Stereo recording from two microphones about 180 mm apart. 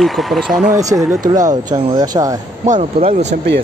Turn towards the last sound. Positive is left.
turn(degrees=-35)  # may be behind; listen again after turning